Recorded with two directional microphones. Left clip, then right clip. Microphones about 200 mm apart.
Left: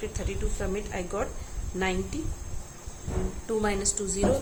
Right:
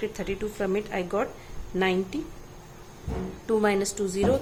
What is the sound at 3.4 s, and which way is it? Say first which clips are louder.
Speech: right 5 dB; 30° right (ahead or behind).